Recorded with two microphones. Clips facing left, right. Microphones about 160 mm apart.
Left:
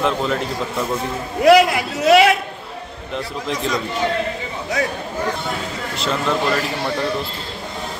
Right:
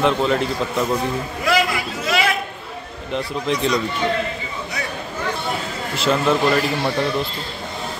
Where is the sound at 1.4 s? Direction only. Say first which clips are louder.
Left 9 dB; 70° left (ahead or behind).